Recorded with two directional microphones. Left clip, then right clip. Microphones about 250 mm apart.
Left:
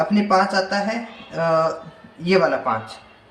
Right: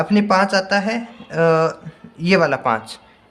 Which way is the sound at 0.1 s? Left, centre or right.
Right.